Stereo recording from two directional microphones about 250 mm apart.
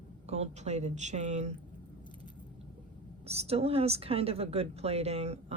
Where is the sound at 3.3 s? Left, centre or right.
Right.